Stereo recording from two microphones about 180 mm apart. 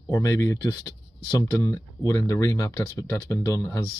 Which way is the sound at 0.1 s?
20° left (ahead or behind).